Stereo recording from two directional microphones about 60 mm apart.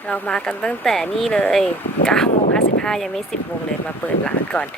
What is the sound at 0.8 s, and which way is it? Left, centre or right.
Speech, centre.